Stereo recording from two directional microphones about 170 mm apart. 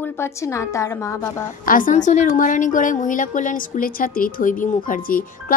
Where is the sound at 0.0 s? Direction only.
15° left (ahead or behind).